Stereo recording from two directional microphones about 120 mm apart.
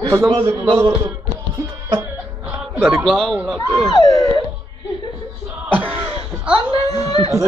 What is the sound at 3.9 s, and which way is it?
Speech, 30° left (ahead or behind).